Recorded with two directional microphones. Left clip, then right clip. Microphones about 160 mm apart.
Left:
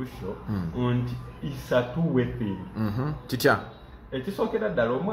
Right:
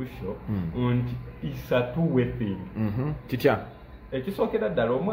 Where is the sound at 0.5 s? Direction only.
5° right (ahead or behind).